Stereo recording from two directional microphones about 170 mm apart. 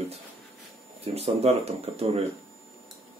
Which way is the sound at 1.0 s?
40° right (ahead or behind).